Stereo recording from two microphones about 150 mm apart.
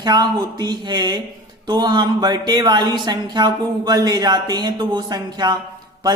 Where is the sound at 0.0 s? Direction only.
30° right (ahead or behind).